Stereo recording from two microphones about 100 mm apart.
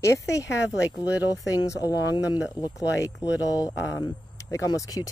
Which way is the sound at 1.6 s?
35° left (ahead or behind).